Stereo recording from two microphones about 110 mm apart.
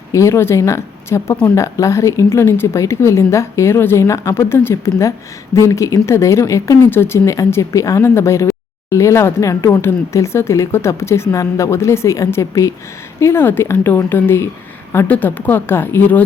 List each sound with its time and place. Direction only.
0.1 s a woman's voice: 25° left (ahead or behind)